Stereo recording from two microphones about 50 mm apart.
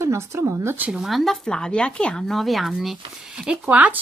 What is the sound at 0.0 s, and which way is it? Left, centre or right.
Speech, right.